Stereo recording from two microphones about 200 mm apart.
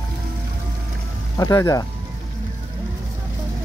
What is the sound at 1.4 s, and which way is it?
Speech, 15° left (ahead or behind).